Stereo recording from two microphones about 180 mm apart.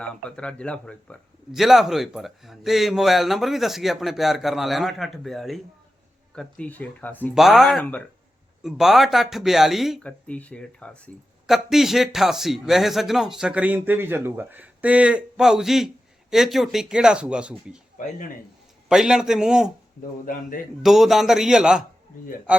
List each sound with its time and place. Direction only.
0.0 s speech: 5° left (ahead or behind)
7.3 s speech: centre (ahead or behind)
18.9 s speech: 5° right (ahead or behind)
20.2 s speech: 50° left (ahead or behind)
20.8 s speech: centre (ahead or behind)